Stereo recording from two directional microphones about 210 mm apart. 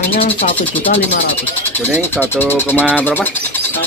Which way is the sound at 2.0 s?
10° left (ahead or behind).